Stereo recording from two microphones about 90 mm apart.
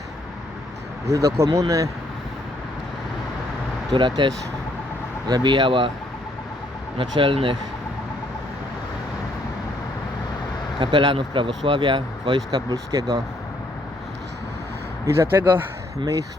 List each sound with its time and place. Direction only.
1.1 s speech: 40° right (ahead or behind)
3.9 s speech: 60° right (ahead or behind)
5.3 s speech: 60° right (ahead or behind)
7.0 s speech: 75° right (ahead or behind)
10.8 s speech: 75° right (ahead or behind)
12.5 s speech: 45° right (ahead or behind)
15.0 s speech: 30° right (ahead or behind)